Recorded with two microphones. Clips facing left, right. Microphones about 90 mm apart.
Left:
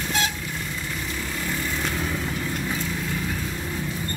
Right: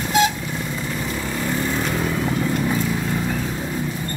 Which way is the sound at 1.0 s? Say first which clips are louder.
Right 6 dB; 40° right (ahead or behind).